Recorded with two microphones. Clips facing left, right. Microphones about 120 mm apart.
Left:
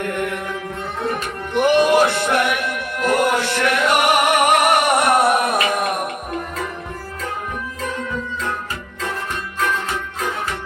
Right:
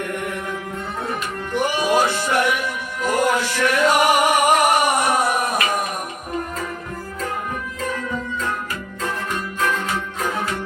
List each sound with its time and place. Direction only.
1.5 s music: 65° left (ahead or behind)